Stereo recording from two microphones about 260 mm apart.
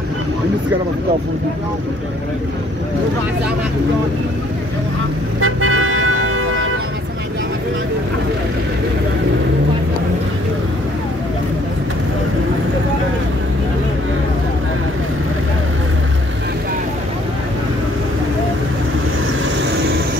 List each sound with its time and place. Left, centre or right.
5.4 s vehicle: right